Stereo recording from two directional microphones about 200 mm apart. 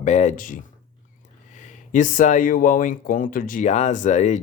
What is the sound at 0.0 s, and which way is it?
Speech, 35° left (ahead or behind).